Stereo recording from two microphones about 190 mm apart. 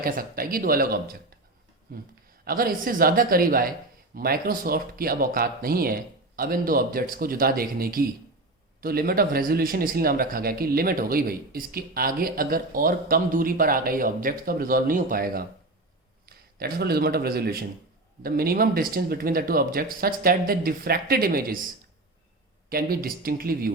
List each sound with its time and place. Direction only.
0.0 s a man's voice: 50° right (ahead or behind)
22.7 s speech: 50° right (ahead or behind)